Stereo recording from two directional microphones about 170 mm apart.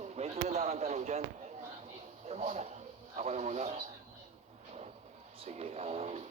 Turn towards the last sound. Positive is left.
turn(degrees=-40)  # may be behind; listen again after turning